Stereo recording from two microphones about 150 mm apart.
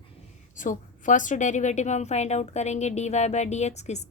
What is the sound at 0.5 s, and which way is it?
A woman's voice, 60° left (ahead or behind).